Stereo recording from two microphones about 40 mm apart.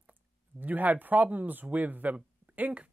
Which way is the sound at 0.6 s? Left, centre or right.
Right.